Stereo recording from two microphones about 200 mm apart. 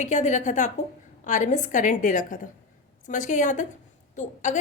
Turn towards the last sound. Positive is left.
turn(degrees=40)  # may be behind; listen again after turning